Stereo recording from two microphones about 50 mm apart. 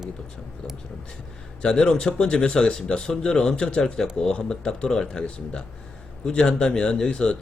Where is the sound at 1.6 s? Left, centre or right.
Centre.